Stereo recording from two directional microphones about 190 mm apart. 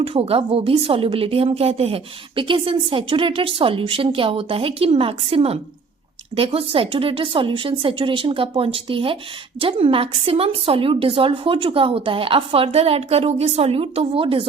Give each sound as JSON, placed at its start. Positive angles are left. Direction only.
{"t": 0.0, "sound": "a woman's voice", "side_deg": -30}